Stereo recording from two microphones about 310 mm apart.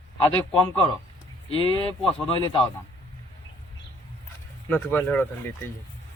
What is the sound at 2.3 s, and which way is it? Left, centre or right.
Speech, centre.